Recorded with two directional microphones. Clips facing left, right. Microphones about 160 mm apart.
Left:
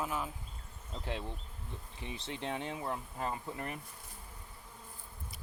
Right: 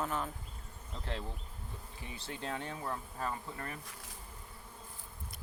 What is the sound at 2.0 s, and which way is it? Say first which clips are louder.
Speech: left 2 dB; 25° left (ahead or behind).